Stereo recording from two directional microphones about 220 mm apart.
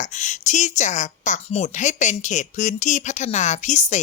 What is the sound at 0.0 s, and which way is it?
A woman's voice, 30° left (ahead or behind).